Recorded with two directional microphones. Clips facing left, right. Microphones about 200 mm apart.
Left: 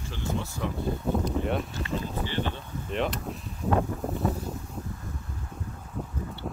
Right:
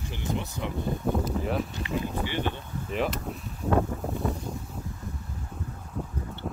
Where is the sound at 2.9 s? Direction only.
Centre (ahead or behind).